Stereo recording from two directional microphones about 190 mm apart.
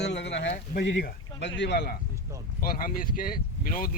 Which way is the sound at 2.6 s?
50° left (ahead or behind).